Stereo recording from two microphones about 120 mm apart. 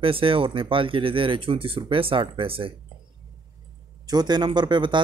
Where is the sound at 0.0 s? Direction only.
50° right (ahead or behind).